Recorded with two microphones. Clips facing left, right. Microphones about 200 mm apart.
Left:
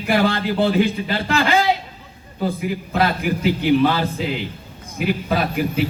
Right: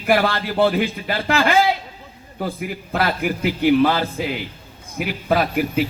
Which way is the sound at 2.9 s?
55° right (ahead or behind).